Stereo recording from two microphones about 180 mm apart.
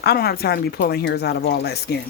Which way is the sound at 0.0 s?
60° left (ahead or behind).